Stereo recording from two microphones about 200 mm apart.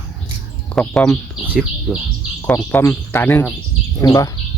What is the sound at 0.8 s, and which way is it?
Speech, centre (ahead or behind).